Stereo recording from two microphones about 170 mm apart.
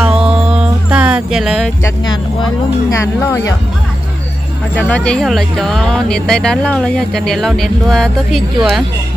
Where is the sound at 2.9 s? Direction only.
20° left (ahead or behind).